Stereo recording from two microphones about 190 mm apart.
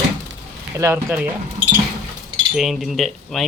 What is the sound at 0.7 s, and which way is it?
Speech, 15° right (ahead or behind).